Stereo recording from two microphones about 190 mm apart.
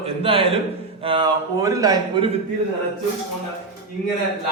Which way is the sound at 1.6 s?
15° right (ahead or behind).